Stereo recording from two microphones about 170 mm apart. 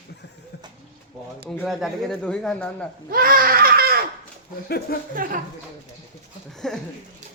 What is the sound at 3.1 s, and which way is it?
Speech, 55° right (ahead or behind).